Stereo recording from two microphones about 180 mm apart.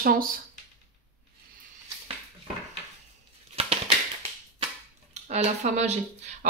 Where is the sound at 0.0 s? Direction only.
50° right (ahead or behind).